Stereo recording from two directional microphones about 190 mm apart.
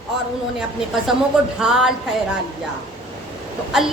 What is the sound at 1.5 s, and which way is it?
Speech, 5° right (ahead or behind).